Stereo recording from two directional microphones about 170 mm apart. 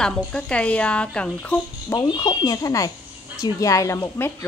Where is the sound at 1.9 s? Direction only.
25° left (ahead or behind).